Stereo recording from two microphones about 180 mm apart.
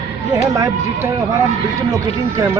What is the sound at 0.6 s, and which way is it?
A man's voice, 15° right (ahead or behind).